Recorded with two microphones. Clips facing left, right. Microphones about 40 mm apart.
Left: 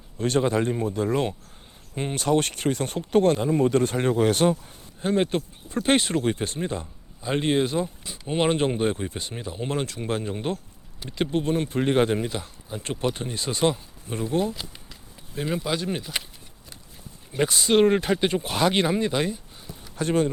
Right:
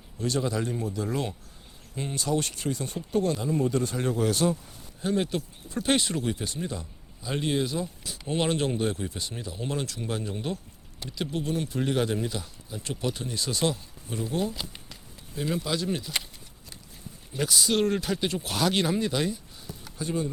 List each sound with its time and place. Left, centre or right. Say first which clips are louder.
0.2 s speech: left 6 dB; left
3.3 s speech: left 5 dB; left
12.8 s speech: left 4 dB; left
15.4 s speech: left 2 dB; left
17.3 s speech: left 5 dB; left
20.0 s speech: left 7 dB; left